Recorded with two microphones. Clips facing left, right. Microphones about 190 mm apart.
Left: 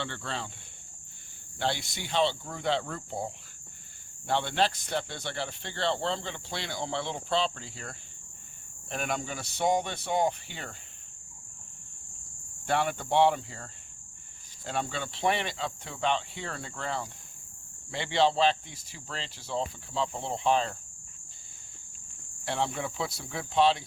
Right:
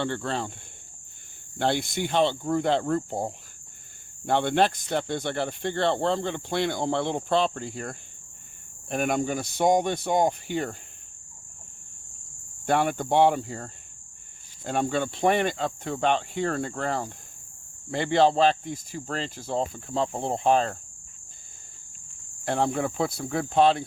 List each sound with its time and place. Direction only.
0.0 s speech: 45° right (ahead or behind)
1.5 s speech: 50° right (ahead or behind)
12.6 s speech: 45° right (ahead or behind)
22.4 s speech: 45° right (ahead or behind)